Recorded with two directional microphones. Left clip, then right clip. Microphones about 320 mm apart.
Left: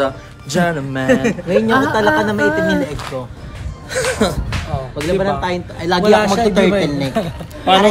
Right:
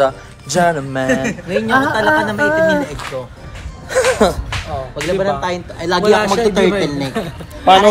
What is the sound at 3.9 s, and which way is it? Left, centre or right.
Speech, centre.